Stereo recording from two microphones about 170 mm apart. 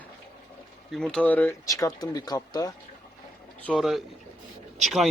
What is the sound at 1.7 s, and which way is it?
Speech, 20° left (ahead or behind).